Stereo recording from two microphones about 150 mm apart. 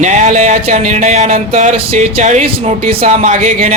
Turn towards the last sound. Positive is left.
turn(degrees=-50)  # may be behind; listen again after turning